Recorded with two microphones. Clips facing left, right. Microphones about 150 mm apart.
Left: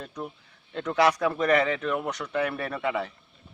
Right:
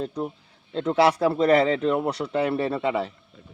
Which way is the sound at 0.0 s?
25° right (ahead or behind).